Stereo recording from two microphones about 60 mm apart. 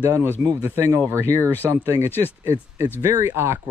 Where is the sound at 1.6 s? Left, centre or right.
Right.